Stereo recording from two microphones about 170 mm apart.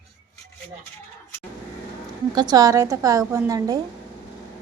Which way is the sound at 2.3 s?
25° right (ahead or behind).